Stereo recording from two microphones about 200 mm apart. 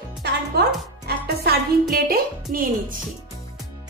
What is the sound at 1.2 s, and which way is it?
Speech, 50° right (ahead or behind).